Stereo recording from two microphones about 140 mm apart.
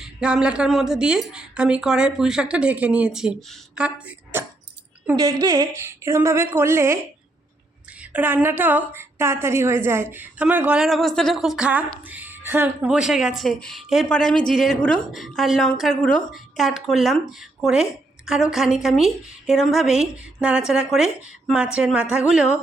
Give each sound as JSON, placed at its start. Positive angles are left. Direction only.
{"t": 0.0, "sound": "a woman's voice", "side_deg": -5}
{"t": 5.2, "sound": "a woman's voice", "side_deg": -25}
{"t": 8.0, "sound": "a woman's voice", "side_deg": -10}